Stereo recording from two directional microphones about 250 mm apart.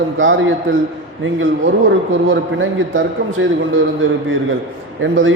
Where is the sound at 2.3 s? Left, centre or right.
Right.